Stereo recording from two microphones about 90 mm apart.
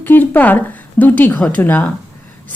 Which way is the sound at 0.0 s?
20° left (ahead or behind).